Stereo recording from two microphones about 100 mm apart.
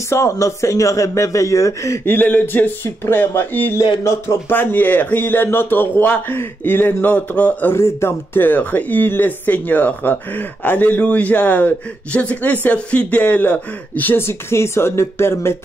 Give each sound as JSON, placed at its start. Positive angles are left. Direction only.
{"t": 0.1, "sound": "a man's voice", "side_deg": 30}
{"t": 4.5, "sound": "a man's voice", "side_deg": 20}
{"t": 7.7, "sound": "speech", "side_deg": 25}